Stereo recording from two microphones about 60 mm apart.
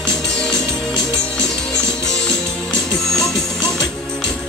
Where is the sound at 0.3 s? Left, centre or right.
Centre.